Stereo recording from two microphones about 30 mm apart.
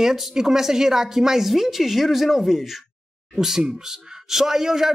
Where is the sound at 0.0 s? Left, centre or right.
Centre.